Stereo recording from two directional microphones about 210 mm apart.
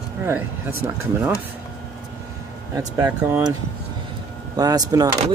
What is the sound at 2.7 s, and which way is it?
Speech, 15° right (ahead or behind).